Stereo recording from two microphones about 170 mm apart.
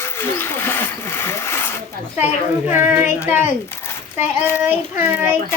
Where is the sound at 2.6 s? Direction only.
15° right (ahead or behind).